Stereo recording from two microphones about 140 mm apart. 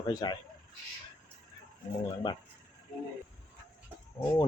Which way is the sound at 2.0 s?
35° left (ahead or behind).